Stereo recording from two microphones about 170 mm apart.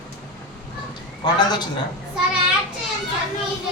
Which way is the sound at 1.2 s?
25° left (ahead or behind).